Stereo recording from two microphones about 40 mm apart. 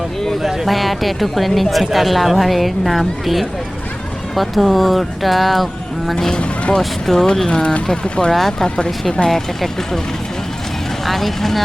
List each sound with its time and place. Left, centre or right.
0.3 s speech: centre
6.1 s speech: centre
7.4 s speech: left
8.3 s speech: centre
8.5 s speech: centre
11.0 s speech: centre